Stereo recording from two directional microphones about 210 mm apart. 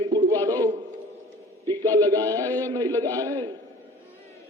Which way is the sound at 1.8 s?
15° right (ahead or behind).